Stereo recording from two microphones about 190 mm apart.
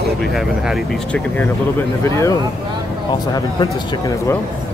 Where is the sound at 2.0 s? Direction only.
15° left (ahead or behind).